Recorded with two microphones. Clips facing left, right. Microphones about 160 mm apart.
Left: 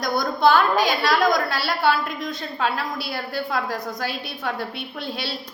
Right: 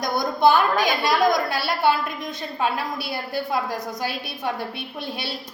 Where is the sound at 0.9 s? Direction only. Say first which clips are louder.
Even; 20° right (ahead or behind).